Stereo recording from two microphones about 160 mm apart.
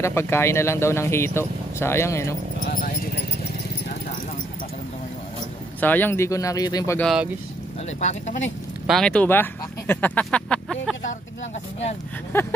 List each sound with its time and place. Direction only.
0.0 s speech: 15° left (ahead or behind)
2.6 s speech: 60° left (ahead or behind)
5.8 s speech: 10° left (ahead or behind)
7.0 s speech: centre (ahead or behind)
8.0 s speech: 45° left (ahead or behind)
8.8 s speech: 5° left (ahead or behind)
12.3 s speech: 15° left (ahead or behind)